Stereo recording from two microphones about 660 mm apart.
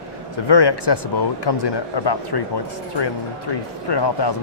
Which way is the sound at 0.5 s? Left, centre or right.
Left.